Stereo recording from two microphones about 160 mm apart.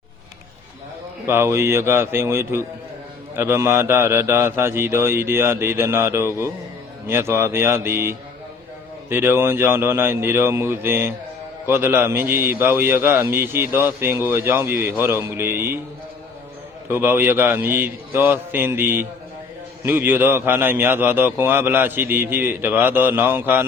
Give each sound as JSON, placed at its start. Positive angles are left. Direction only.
{"t": 1.3, "sound": "a man's voice", "side_deg": -15}
{"t": 16.9, "sound": "a man's voice", "side_deg": -15}